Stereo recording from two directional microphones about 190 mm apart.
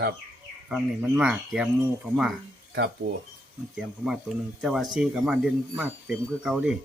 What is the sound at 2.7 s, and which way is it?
Speech, 60° right (ahead or behind).